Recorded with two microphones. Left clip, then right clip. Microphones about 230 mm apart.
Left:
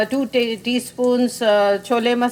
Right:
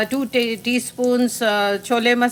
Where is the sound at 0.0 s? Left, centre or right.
Centre.